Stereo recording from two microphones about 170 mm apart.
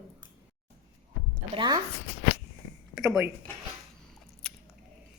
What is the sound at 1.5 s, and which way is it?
Speech, 25° right (ahead or behind).